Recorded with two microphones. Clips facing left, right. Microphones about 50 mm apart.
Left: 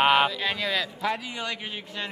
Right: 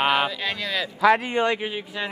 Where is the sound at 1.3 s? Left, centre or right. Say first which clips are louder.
Right 11 dB; right.